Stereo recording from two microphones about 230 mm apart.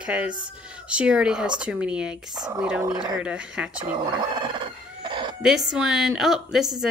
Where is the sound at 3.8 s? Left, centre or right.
Centre.